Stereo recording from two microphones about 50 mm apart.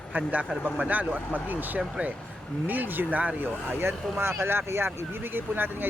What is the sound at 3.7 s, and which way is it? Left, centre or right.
Speech, right.